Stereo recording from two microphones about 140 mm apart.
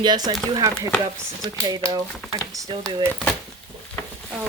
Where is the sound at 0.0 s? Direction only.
30° right (ahead or behind).